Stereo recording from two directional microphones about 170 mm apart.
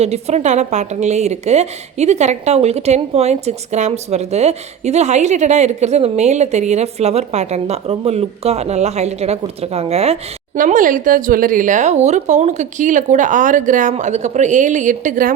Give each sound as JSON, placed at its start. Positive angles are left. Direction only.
{"t": 0.0, "sound": "a woman's voice", "side_deg": -40}
{"t": 10.6, "sound": "a woman's voice", "side_deg": -55}